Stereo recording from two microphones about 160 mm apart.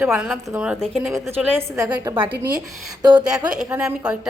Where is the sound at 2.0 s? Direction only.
30° right (ahead or behind).